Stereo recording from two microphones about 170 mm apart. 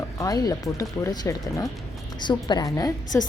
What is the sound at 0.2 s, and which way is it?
A woman's voice, 20° left (ahead or behind).